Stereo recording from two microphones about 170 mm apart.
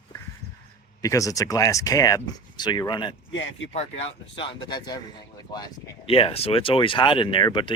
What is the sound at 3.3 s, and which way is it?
Speech, 90° left.